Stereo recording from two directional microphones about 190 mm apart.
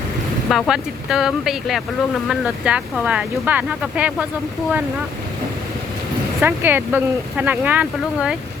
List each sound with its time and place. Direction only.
0.5 s speech: centre (ahead or behind)
6.4 s speech: 10° right (ahead or behind)